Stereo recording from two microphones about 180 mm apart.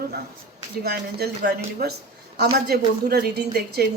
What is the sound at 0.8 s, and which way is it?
Speech, 60° right (ahead or behind).